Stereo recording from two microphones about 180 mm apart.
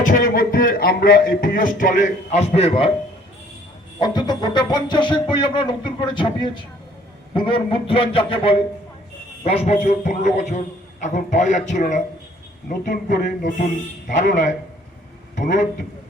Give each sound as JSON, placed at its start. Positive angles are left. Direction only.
{"t": 0.1, "sound": "a man's voice", "side_deg": 50}
{"t": 4.0, "sound": "a man's voice", "side_deg": 25}